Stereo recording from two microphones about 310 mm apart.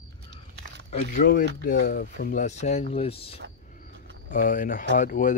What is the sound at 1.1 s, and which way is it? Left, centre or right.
Speech, left.